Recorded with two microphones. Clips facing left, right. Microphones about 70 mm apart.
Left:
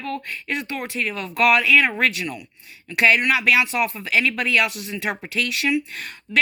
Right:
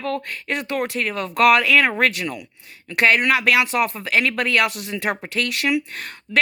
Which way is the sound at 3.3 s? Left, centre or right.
Right.